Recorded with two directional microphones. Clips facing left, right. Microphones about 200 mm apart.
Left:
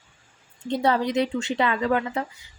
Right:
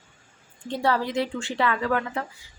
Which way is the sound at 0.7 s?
20° left (ahead or behind).